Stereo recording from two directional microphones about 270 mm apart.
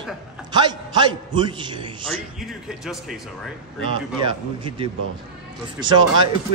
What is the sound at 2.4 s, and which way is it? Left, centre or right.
Speech, centre.